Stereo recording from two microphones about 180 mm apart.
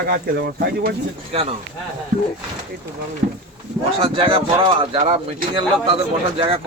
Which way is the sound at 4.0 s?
30° right (ahead or behind).